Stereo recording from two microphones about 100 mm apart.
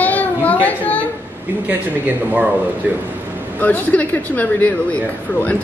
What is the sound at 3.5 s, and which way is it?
A woman's voice, 15° left (ahead or behind).